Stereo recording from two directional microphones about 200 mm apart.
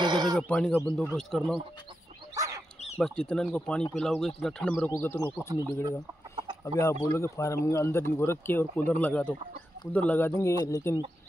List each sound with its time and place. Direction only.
0.0 s sheep: 20° right (ahead or behind)
0.4 s speech: 5° left (ahead or behind)
2.3 s bird: 15° right (ahead or behind)
3.0 s speech: 5° left (ahead or behind)
5.9 s chicken: 20° right (ahead or behind)
6.8 s speech: 15° left (ahead or behind)